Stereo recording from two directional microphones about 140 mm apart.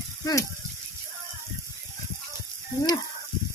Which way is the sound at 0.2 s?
25° left (ahead or behind).